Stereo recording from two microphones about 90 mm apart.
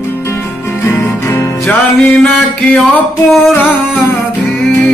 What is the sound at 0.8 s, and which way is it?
Music, 30° left (ahead or behind).